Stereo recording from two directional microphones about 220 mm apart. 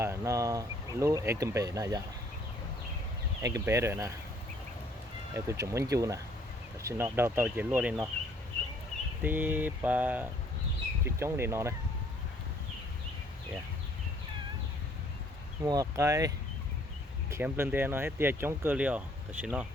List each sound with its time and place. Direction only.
0.0 s speech: 15° right (ahead or behind)
3.4 s speech: 15° right (ahead or behind)
5.3 s speech: 15° right (ahead or behind)
9.2 s speech: 10° right (ahead or behind)
15.6 s speech: 15° right (ahead or behind)